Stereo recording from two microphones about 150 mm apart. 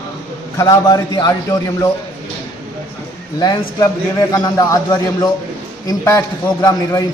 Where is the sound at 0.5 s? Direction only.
20° left (ahead or behind).